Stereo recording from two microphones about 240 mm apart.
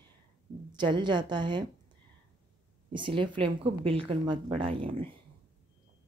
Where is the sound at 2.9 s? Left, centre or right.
Right.